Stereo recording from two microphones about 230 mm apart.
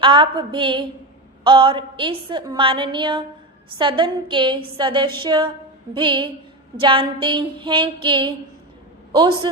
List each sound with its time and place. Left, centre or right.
0.0 s a woman's voice: right